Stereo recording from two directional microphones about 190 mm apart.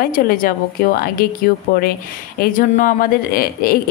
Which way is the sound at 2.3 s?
50° left (ahead or behind).